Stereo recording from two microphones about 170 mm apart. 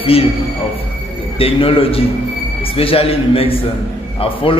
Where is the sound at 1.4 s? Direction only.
35° left (ahead or behind).